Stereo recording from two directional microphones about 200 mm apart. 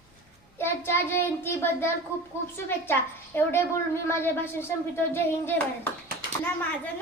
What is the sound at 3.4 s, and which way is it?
Speech, 10° left (ahead or behind).